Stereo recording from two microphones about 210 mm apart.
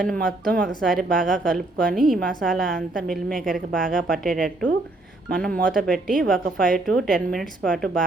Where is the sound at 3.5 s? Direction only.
40° right (ahead or behind).